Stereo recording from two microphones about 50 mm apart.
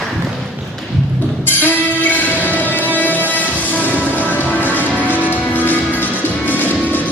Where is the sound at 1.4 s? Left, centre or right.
Left.